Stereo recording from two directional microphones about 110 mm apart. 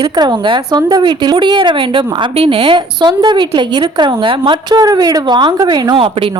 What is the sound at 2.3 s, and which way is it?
A woman's voice, 60° right (ahead or behind).